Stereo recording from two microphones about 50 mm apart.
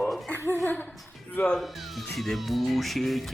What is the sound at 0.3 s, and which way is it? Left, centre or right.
Chuckle, left.